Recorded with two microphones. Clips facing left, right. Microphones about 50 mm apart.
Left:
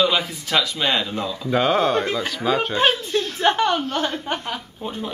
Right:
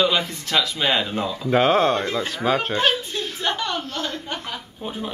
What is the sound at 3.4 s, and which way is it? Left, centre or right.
Chuckle, left.